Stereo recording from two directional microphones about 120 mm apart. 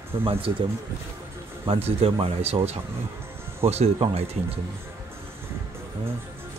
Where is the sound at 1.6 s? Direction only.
55° right (ahead or behind).